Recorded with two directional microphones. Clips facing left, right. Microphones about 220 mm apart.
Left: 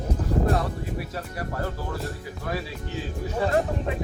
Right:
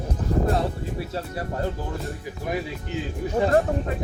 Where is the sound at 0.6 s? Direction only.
25° right (ahead or behind).